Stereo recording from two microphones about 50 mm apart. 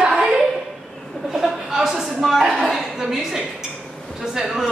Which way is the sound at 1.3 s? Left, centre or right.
Centre.